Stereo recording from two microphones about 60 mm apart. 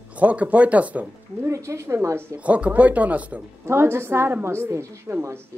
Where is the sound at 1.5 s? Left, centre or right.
Right.